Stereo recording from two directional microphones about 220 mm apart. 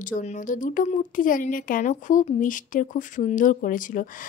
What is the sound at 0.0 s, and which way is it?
Speech, 35° left (ahead or behind).